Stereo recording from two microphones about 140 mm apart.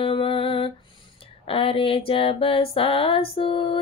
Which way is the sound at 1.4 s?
40° left (ahead or behind).